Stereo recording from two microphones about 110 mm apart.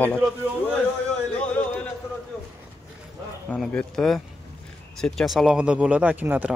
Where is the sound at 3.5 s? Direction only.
10° left (ahead or behind).